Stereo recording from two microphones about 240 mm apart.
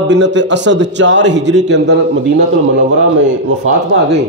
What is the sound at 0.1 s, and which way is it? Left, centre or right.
A man's voice, right.